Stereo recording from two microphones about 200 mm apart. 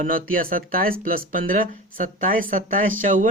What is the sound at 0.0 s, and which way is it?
Speech, 45° right (ahead or behind).